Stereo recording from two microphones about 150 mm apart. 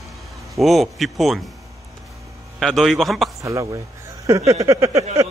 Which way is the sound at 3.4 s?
20° right (ahead or behind).